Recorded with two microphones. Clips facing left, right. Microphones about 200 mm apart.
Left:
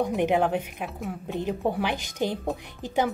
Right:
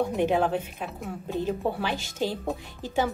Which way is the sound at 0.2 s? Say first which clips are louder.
Even; 15° left (ahead or behind).